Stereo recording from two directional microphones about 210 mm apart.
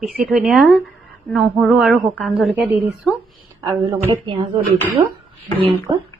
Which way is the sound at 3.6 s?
20° right (ahead or behind).